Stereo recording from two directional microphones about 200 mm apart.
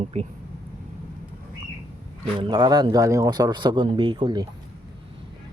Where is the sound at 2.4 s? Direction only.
20° right (ahead or behind).